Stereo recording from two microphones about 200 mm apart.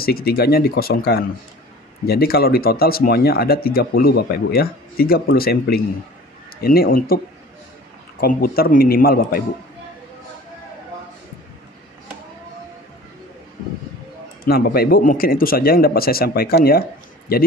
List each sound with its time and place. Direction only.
0.0 s speech: 50° left (ahead or behind)
8.2 s speech: 50° left (ahead or behind)
14.4 s speech: 50° left (ahead or behind)